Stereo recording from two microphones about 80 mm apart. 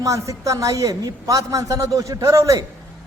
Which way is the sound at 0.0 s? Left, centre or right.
Right.